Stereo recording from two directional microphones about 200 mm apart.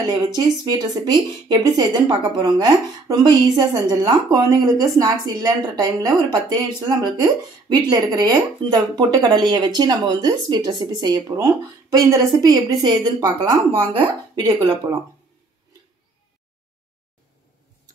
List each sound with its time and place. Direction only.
0.0 s speech: 20° right (ahead or behind)